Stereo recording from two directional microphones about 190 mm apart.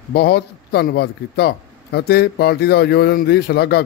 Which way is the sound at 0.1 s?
60° left (ahead or behind).